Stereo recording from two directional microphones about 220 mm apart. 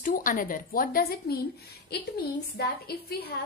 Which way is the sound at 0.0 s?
40° left (ahead or behind).